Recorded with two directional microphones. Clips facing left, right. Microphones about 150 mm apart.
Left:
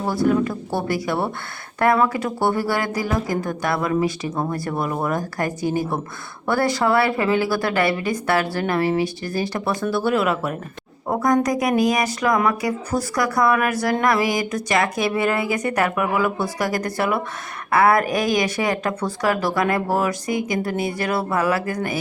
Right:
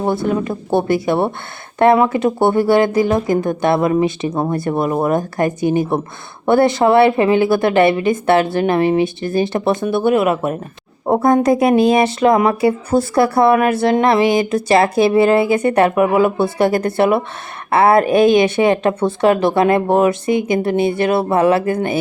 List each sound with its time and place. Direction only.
0.0 s speech: 25° right (ahead or behind)
11.0 s a sound: 30° right (ahead or behind)
11.4 s speech: 30° right (ahead or behind)